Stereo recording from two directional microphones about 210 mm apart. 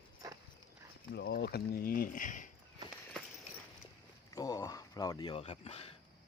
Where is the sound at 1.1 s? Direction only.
55° left (ahead or behind); by 2.5 s 40° left (ahead or behind).